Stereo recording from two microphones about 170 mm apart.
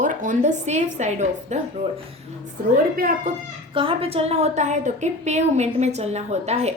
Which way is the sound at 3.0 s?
55° right (ahead or behind).